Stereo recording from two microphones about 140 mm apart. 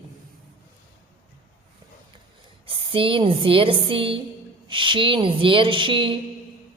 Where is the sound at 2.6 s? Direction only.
40° right (ahead or behind).